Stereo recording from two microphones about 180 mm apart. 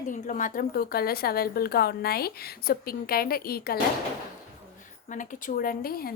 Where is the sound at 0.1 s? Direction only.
45° left (ahead or behind).